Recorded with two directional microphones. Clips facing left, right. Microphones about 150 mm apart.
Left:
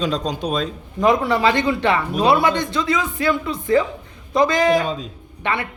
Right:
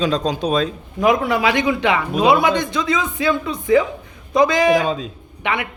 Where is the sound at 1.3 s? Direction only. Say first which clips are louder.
Even; 10° right (ahead or behind).